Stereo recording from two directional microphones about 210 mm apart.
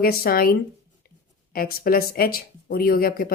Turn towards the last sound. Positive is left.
turn(degrees=45)  # may be behind; listen again after turning